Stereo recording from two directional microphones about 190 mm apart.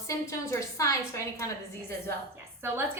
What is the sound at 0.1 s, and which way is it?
A woman's voice, 15° left (ahead or behind).